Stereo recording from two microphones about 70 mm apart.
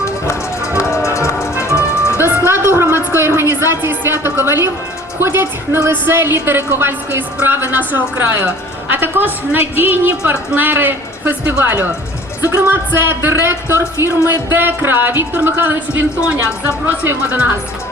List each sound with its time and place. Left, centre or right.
0.0 s music: left
2.1 s a sound: right
5.2 s a woman's voice: right